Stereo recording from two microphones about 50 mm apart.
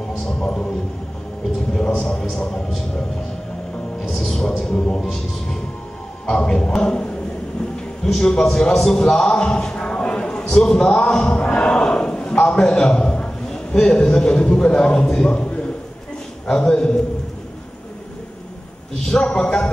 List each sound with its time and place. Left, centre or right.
0.4 s a sound: centre
2.0 s a man's voice: centre
4.1 s a man's voice: centre
19.3 s a man's voice: centre